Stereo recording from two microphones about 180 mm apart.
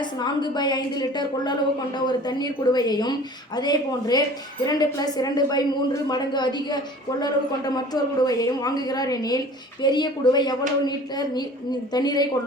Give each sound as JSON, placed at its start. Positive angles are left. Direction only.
{"t": 0.0, "sound": "a man's voice", "side_deg": 25}